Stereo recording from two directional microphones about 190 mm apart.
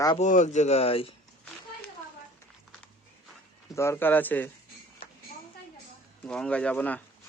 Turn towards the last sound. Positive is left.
turn(degrees=10)  # may be behind; listen again after turning